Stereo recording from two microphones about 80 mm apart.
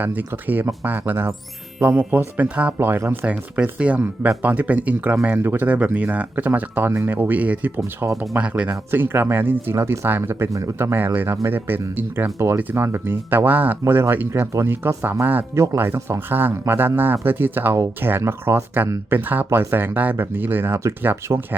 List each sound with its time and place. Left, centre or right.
0.0 s speech: right
2.7 s speech: right
3.2 s speech: centre
8.0 s speech: right
8.4 s speech: centre
8.9 s speech: right
9.7 s speech: right
15.5 s speech: right